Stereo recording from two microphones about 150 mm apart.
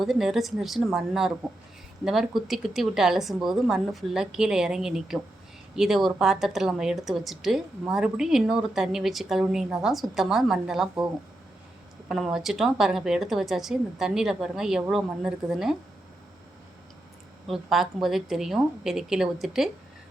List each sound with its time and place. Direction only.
0.0 s a woman's voice: centre (ahead or behind)
12.0 s a woman's voice: centre (ahead or behind)
17.5 s a woman's voice: centre (ahead or behind)